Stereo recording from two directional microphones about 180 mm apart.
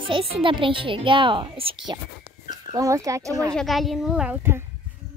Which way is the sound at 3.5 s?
Centre (ahead or behind).